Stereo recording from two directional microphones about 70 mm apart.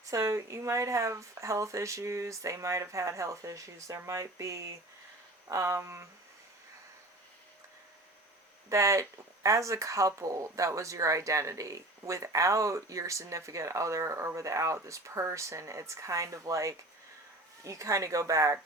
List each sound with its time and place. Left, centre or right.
0.0 s speech: right
8.7 s speech: right